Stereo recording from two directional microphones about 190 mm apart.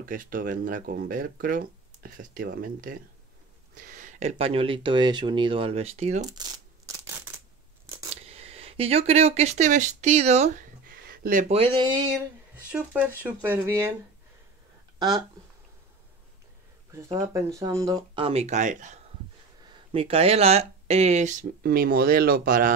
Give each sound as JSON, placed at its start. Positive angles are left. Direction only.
{"t": 0.0, "sound": "speech", "side_deg": -45}
{"t": 6.2, "sound": "tearing", "side_deg": -20}
{"t": 8.1, "sound": "speech", "side_deg": -35}
{"t": 10.9, "sound": "speech", "side_deg": -50}
{"t": 12.7, "sound": "speech", "side_deg": -5}
{"t": 15.0, "sound": "speech", "side_deg": -20}
{"t": 16.9, "sound": "speech", "side_deg": -15}
{"t": 19.7, "sound": "speech", "side_deg": -30}